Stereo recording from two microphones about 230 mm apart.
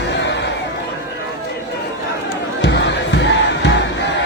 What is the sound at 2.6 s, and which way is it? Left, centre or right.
Crowd, left.